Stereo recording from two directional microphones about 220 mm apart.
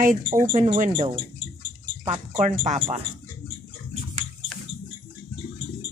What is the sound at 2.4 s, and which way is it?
Speech, 30° right (ahead or behind).